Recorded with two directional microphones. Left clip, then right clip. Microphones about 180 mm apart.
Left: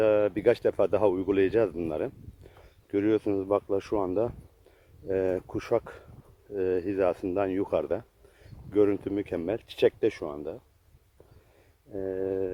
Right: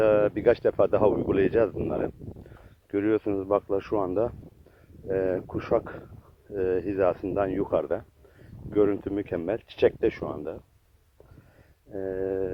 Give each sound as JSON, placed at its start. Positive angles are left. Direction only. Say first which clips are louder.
{"t": 0.0, "sound": "speech", "louder": "right 2 dB", "side_deg": 20}
{"t": 11.9, "sound": "speech", "louder": "right 1 dB", "side_deg": 20}